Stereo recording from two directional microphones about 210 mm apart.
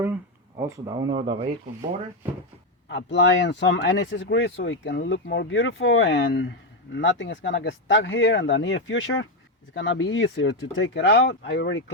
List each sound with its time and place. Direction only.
0.6 s speech: 20° right (ahead or behind)
2.9 s speech: 60° left (ahead or behind)